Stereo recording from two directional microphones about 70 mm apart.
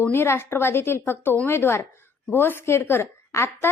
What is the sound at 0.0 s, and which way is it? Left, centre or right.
A woman's voice, left.